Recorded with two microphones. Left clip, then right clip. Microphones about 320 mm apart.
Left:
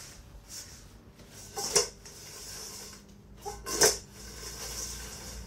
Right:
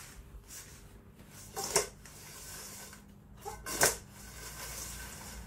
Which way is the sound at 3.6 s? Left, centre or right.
Centre.